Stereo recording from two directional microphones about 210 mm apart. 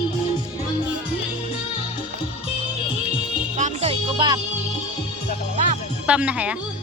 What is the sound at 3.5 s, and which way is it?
Music, 35° right (ahead or behind).